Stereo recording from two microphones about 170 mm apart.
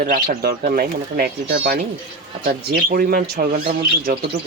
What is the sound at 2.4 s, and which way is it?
Speech, 60° right (ahead or behind).